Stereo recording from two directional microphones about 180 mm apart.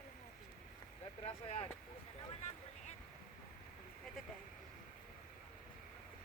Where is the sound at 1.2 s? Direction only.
35° left (ahead or behind).